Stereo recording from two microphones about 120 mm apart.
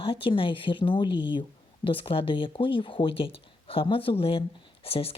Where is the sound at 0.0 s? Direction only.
45° left (ahead or behind).